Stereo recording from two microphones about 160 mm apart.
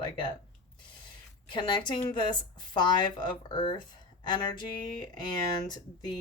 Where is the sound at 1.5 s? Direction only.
30° left (ahead or behind).